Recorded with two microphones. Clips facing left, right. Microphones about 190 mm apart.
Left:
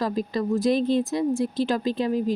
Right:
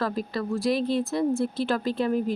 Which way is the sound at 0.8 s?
45° left (ahead or behind).